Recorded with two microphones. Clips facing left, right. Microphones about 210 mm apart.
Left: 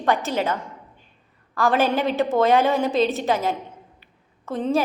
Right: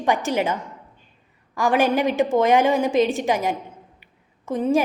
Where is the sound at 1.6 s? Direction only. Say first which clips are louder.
Right 1 dB; 15° right (ahead or behind).